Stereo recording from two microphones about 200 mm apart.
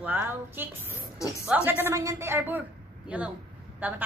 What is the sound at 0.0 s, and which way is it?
A man's voice, 10° right (ahead or behind).